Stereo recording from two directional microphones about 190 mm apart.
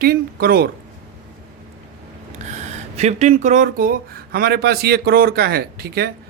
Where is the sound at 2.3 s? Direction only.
40° right (ahead or behind).